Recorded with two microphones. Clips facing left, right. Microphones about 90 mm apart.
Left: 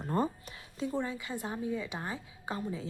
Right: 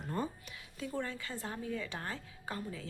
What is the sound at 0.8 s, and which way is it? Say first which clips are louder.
A woman's voice: left 5 dB; 20° left (ahead or behind).